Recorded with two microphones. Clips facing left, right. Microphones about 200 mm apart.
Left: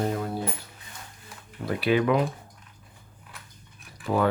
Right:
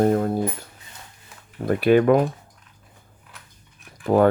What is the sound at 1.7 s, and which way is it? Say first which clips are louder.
Speech: right 7 dB; 50° right (ahead or behind).